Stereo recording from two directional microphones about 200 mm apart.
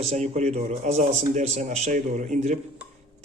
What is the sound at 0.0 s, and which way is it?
A man's voice, 35° right (ahead or behind).